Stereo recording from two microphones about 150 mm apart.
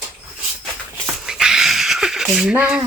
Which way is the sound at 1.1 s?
5° right (ahead or behind).